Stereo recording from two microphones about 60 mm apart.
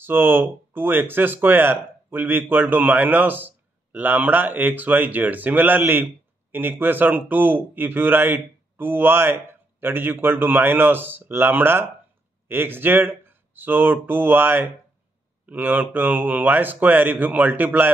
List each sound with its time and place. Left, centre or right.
0.0 s speech: right